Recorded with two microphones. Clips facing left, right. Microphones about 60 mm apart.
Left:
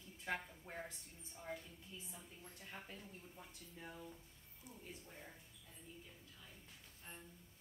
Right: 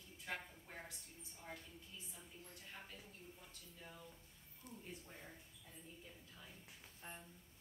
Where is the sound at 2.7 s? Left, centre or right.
Centre.